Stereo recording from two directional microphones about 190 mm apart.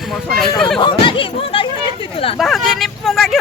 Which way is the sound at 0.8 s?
25° left (ahead or behind).